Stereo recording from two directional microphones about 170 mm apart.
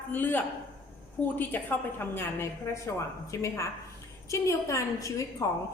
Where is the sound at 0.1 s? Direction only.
10° left (ahead or behind).